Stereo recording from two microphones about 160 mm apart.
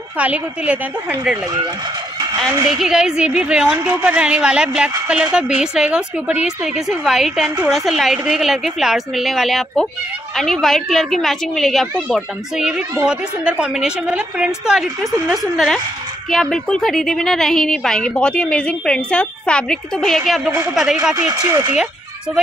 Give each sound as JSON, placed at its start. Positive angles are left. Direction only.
{"t": 0.2, "sound": "a woman's voice", "side_deg": -10}
{"t": 2.7, "sound": "a woman's voice", "side_deg": -5}
{"t": 21.3, "sound": "speech", "side_deg": -25}